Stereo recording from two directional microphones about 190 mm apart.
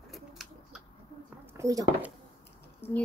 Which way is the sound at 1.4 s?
15° right (ahead or behind).